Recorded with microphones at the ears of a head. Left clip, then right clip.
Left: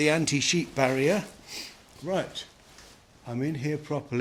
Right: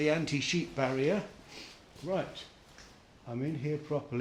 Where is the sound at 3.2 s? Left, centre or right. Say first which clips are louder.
Left 6 dB; left.